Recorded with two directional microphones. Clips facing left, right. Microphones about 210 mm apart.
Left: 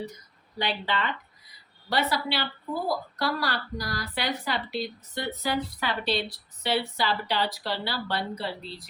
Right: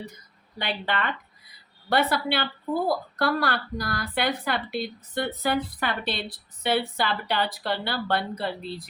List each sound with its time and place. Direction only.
0.6 s a woman's voice: 55° right (ahead or behind)